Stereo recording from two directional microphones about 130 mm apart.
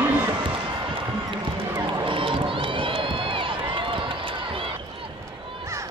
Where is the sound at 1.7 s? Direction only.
40° right (ahead or behind).